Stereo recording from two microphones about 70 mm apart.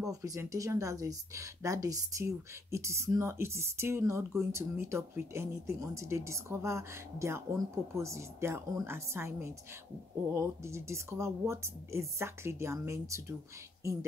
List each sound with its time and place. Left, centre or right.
0.0 s a woman's voice: right